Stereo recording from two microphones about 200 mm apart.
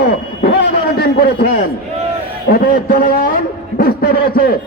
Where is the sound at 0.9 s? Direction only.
50° left (ahead or behind).